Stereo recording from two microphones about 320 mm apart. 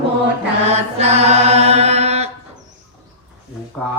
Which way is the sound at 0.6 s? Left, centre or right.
Centre.